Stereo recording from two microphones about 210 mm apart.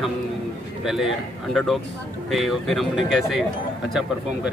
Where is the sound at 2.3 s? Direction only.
Centre (ahead or behind).